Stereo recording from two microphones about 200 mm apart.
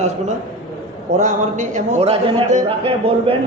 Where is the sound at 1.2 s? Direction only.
40° right (ahead or behind).